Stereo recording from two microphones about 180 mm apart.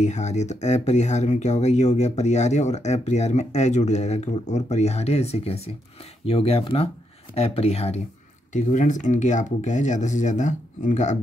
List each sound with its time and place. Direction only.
0.0 s speech: 40° left (ahead or behind)